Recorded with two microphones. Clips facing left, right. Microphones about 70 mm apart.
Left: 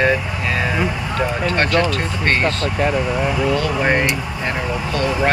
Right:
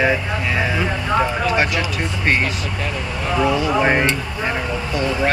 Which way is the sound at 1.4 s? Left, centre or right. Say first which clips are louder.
Left 2 dB; centre.